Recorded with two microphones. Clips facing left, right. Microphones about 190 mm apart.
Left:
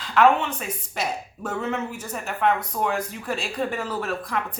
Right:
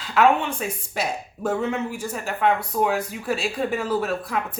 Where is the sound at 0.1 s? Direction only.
10° right (ahead or behind).